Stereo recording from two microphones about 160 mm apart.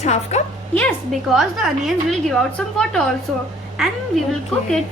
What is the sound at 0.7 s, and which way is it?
Speech, 10° left (ahead or behind).